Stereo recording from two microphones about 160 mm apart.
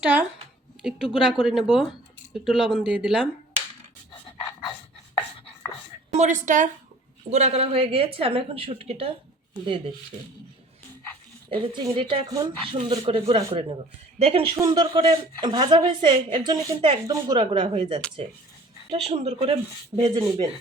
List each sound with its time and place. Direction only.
0.0 s speech: 10° right (ahead or behind)
6.1 s a woman's voice: 45° right (ahead or behind)
11.5 s a woman's voice: 30° right (ahead or behind)
14.5 s a woman's voice: 25° right (ahead or behind)
20.1 s a woman's voice: 25° right (ahead or behind)